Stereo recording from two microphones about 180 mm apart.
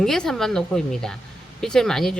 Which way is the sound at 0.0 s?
Centre (ahead or behind).